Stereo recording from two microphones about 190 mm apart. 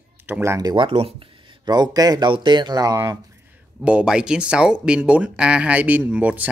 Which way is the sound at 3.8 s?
5° right (ahead or behind).